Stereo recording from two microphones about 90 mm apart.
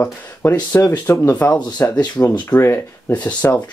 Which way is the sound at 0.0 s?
25° left (ahead or behind).